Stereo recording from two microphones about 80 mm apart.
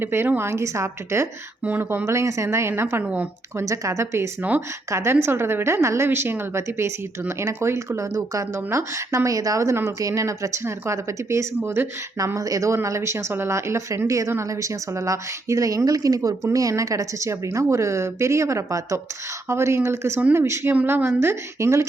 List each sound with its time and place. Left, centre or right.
0.0 s a woman's voice: right
1.6 s a woman's voice: right
12.2 s a woman's voice: right